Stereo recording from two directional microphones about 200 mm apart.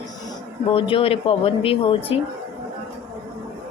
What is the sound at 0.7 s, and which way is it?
Speech, 25° left (ahead or behind).